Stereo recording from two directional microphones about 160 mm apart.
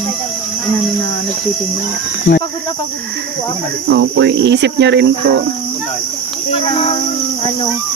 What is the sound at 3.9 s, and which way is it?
Cricket, 90° right.